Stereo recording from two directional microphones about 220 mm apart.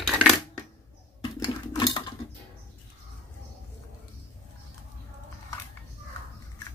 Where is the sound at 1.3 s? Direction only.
20° left (ahead or behind).